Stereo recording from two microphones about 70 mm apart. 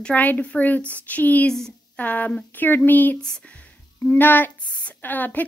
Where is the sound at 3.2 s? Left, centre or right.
Centre.